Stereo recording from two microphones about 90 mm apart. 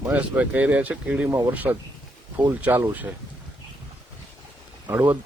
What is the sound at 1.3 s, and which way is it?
Speech, 30° right (ahead or behind).